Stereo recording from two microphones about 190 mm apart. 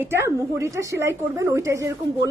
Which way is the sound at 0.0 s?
15° right (ahead or behind).